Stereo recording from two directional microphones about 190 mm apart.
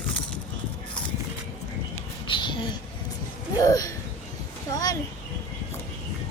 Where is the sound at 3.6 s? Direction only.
20° left (ahead or behind).